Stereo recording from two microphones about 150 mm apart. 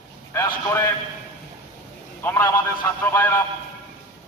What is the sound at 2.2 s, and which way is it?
Speech, 15° left (ahead or behind).